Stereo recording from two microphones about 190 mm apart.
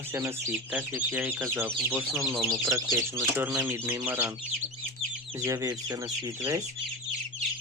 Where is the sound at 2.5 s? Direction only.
15° right (ahead or behind).